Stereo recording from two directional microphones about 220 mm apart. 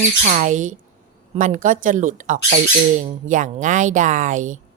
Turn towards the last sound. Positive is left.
turn(degrees=-35)  # may be behind; listen again after turning